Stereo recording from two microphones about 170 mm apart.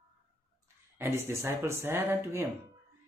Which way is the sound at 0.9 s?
15° right (ahead or behind).